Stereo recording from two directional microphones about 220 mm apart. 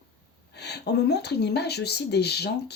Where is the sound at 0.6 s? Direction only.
50° left (ahead or behind).